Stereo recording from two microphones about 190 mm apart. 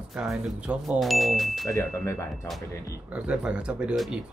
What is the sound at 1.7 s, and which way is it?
Speech, 15° left (ahead or behind).